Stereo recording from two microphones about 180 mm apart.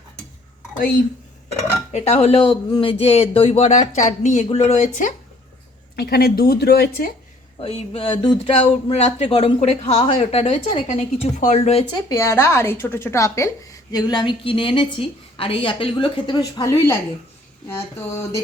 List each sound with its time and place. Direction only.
1.9 s speech: 40° left (ahead or behind)
6.0 s a woman's voice: 60° left (ahead or behind)
7.6 s speech: 30° left (ahead or behind)
12.0 s a woman's voice: 20° left (ahead or behind)
17.7 s a sound: 15° left (ahead or behind)